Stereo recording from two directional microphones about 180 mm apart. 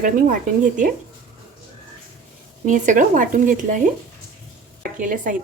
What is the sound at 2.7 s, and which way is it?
A woman's voice, 45° right (ahead or behind).